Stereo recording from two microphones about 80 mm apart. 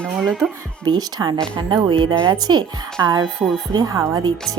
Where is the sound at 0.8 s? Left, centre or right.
Right.